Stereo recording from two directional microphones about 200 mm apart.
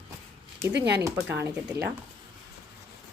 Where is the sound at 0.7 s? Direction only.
60° right (ahead or behind).